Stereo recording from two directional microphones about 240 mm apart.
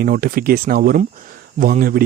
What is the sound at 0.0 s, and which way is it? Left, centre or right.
Speech, right.